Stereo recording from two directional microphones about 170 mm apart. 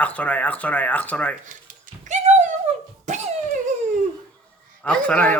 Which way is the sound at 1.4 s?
45° right (ahead or behind).